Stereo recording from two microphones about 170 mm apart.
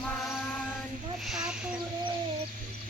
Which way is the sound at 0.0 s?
Centre (ahead or behind).